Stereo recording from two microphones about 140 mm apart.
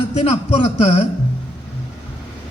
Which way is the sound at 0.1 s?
50° left (ahead or behind).